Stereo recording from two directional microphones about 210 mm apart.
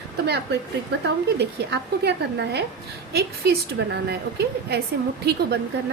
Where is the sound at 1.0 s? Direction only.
55° right (ahead or behind).